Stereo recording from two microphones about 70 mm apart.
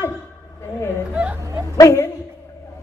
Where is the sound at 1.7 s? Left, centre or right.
Left.